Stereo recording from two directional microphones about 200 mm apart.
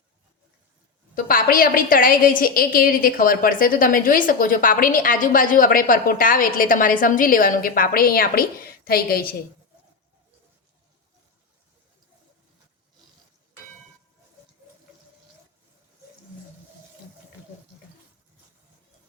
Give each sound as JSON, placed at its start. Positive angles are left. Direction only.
{"t": 1.1, "sound": "a woman's voice", "side_deg": 45}